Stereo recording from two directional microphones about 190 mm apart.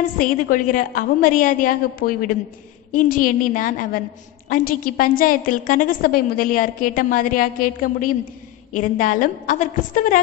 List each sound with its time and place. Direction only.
0.2 s a woman's voice: 45° left (ahead or behind)